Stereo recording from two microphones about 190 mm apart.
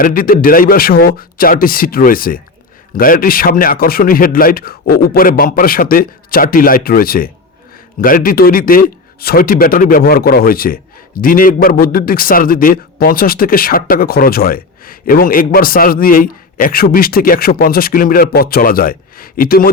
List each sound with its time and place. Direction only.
0.0 s speech: 50° left (ahead or behind)